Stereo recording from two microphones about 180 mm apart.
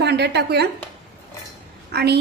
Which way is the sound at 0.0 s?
65° right (ahead or behind).